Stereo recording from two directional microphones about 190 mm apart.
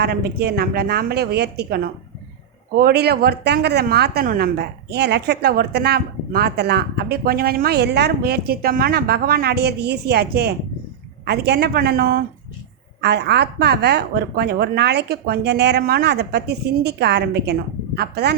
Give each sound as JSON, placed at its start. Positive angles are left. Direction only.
{"t": 0.0, "sound": "a woman's voice", "side_deg": -55}